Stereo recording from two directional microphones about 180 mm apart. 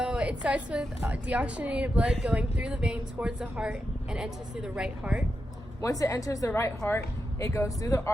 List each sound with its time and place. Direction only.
0.0 s a woman's voice: 5° right (ahead or behind)
5.8 s a woman's voice: 20° left (ahead or behind)